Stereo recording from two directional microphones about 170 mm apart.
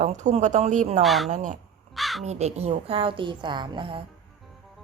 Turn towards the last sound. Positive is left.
turn(degrees=-30)  # may be behind; listen again after turning